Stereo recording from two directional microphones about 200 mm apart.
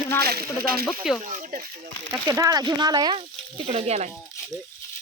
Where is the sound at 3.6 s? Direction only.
30° right (ahead or behind).